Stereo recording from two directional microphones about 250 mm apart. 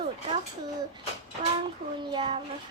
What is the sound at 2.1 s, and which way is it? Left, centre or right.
Speech, centre.